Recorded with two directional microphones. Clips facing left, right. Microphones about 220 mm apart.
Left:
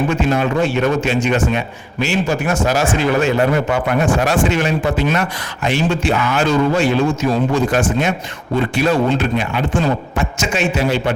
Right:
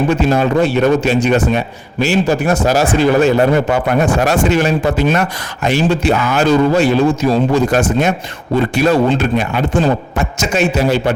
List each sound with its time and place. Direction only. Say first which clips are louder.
0.1 s a man's voice: right 4 dB; 35° right (ahead or behind)